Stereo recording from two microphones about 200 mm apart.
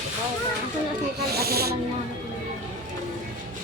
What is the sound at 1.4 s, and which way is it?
Snake, 50° right (ahead or behind).